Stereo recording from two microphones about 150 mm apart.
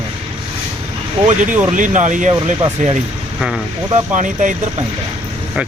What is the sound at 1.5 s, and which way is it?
Speech, 60° right (ahead or behind).